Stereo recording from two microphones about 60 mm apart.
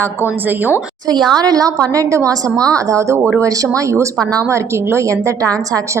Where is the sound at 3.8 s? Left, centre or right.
Right.